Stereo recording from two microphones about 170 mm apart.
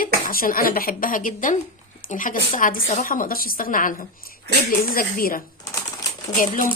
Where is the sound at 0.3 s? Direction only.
55° left (ahead or behind).